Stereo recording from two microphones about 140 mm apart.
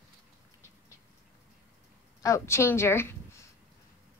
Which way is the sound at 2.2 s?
20° left (ahead or behind).